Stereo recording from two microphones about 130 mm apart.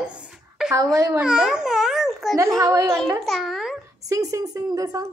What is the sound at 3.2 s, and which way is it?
Speech, centre (ahead or behind).